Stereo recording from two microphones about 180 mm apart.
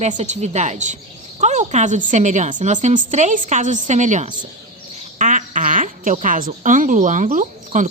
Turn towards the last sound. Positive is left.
turn(degrees=-45)  # may be behind; listen again after turning